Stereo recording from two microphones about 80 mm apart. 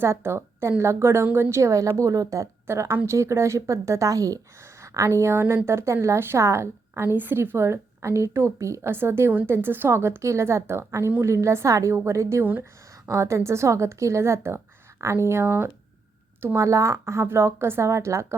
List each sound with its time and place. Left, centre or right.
0.0 s a woman's voice: right
16.6 s a woman's voice: right